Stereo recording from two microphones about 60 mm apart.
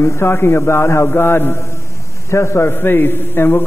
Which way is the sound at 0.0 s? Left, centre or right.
Left.